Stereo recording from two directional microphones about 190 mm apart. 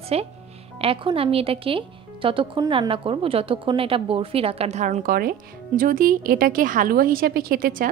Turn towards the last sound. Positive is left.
turn(degrees=-50)  # may be behind; listen again after turning